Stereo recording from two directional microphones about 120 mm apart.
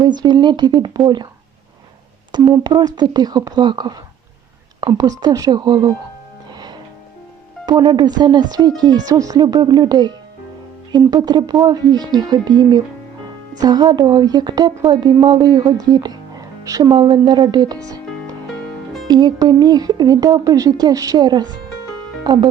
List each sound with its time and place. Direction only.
0.0 s speech: 40° right (ahead or behind)
2.3 s speech: 35° right (ahead or behind)
6.5 s music: 35° right (ahead or behind)
7.6 s speech: 35° right (ahead or behind)
16.9 s speech: 40° right (ahead or behind)